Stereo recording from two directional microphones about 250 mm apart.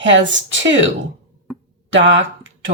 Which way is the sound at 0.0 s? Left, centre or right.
Right.